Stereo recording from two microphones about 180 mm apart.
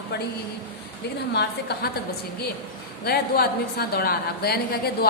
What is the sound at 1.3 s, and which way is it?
Speech, 65° left (ahead or behind).